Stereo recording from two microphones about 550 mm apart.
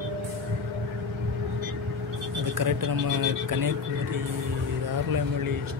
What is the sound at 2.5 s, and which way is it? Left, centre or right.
Speech, right.